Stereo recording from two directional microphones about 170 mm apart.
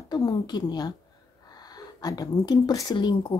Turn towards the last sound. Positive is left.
turn(degrees=25)  # may be behind; listen again after turning